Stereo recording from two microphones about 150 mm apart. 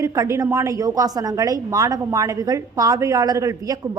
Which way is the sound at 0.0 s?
20° right (ahead or behind).